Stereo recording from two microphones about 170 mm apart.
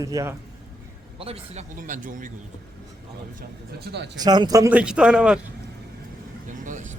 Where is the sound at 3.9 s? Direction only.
65° right (ahead or behind).